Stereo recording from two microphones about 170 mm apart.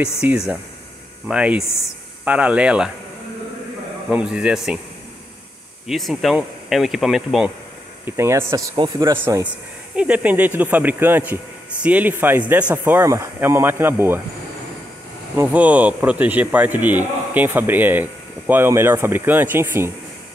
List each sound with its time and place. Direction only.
0.2 s a man's voice: 5° right (ahead or behind)
4.1 s speech: 5° right (ahead or behind)
5.9 s speech: centre (ahead or behind)
8.2 s a man's voice: 15° right (ahead or behind)
8.7 s speech: 30° right (ahead or behind)
9.9 s a man's voice: 10° right (ahead or behind)
15.3 s a man's voice: 10° right (ahead or behind)